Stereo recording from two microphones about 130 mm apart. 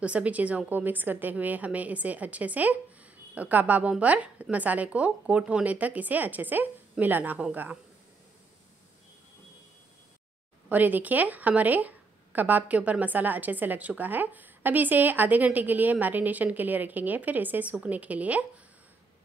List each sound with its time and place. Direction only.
0.0 s a woman's voice: 10° right (ahead or behind)
10.7 s a woman's voice: 15° right (ahead or behind)